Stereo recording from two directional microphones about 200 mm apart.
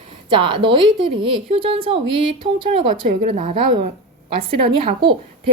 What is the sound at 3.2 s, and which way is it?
Speech, 40° right (ahead or behind).